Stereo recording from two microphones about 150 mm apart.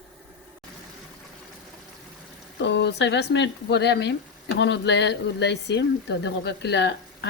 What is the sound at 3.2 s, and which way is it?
Speech, 90° left.